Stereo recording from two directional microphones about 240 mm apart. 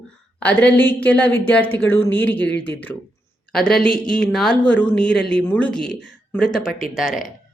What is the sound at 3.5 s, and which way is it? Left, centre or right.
Speech, centre.